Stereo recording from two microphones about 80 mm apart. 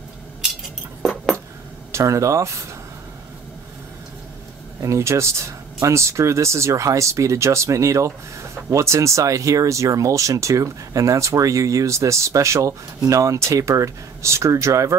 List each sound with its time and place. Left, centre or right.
1.9 s speech: right
4.7 s speech: right